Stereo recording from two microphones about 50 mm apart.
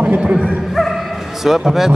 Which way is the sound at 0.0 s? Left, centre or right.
Right.